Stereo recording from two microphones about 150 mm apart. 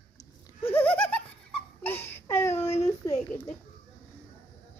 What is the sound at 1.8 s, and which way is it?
Baby cry, 15° left (ahead or behind).